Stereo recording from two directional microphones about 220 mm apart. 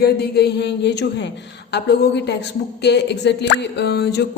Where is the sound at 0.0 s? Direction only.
45° left (ahead or behind).